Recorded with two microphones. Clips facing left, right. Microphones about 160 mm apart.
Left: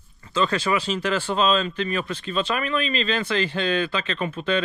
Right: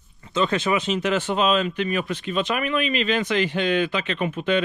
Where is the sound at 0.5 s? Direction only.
20° right (ahead or behind).